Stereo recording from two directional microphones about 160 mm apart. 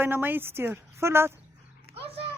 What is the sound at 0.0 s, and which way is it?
A woman's voice, 10° right (ahead or behind).